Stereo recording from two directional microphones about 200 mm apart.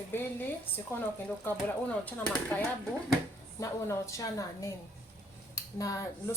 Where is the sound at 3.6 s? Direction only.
15° left (ahead or behind).